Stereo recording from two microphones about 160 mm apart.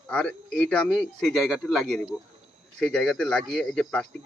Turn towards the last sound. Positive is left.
turn(degrees=5)  # may be behind; listen again after turning